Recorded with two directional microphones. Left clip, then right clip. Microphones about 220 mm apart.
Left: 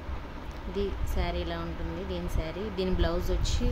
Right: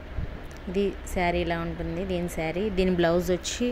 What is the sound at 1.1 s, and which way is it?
Speech, 25° right (ahead or behind).